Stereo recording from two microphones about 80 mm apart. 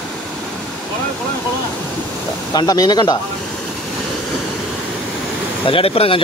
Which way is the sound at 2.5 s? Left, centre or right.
Left.